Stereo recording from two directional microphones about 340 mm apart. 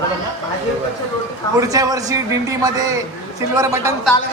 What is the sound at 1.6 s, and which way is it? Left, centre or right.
A man's voice, centre.